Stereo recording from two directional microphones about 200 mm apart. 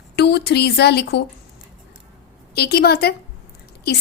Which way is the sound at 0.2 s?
55° left (ahead or behind).